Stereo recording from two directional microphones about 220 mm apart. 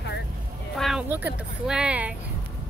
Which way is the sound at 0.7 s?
Centre (ahead or behind).